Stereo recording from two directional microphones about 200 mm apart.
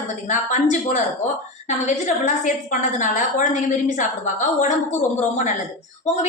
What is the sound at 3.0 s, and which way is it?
A woman's voice, 40° left (ahead or behind).